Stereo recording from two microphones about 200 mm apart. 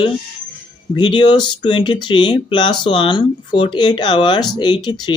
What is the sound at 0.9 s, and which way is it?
Speech, 20° left (ahead or behind).